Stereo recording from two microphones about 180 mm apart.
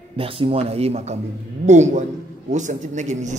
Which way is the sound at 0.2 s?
30° right (ahead or behind).